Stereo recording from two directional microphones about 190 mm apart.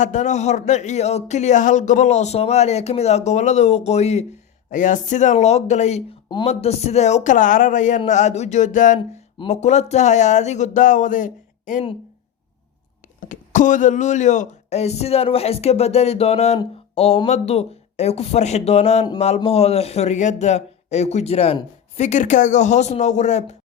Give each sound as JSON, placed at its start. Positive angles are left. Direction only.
{"t": 0.0, "sound": "a man's voice", "side_deg": 40}
{"t": 13.1, "sound": "a man's voice", "side_deg": 45}